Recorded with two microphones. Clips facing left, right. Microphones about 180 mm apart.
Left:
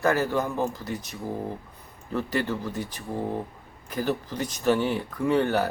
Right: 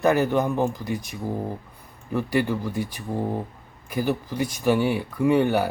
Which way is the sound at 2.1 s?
10° right (ahead or behind).